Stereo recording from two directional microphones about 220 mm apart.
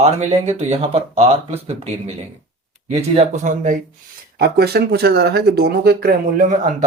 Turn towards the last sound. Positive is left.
turn(degrees=-40)  # may be behind; listen again after turning